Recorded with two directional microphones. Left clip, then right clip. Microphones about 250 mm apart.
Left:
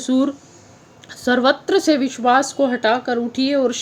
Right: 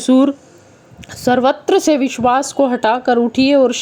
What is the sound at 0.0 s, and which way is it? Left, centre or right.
Speech, right.